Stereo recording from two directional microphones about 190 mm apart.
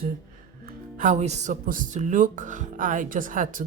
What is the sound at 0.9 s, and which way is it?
A woman's voice, 40° right (ahead or behind).